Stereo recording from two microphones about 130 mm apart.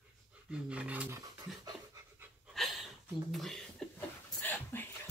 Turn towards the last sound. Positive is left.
turn(degrees=15)  # may be behind; listen again after turning